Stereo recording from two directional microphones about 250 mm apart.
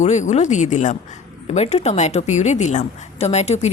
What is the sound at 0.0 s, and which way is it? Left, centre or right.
A woman's voice, left.